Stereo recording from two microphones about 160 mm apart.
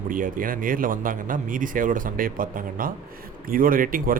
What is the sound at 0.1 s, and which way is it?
Speech, 60° right (ahead or behind).